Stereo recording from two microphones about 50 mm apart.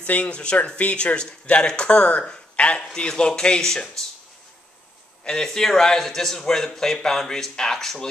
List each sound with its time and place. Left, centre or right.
0.0 s speech: left
2.8 s a man's voice: centre
5.2 s a man's voice: centre